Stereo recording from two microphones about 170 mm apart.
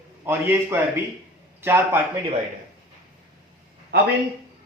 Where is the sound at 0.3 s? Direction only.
15° right (ahead or behind).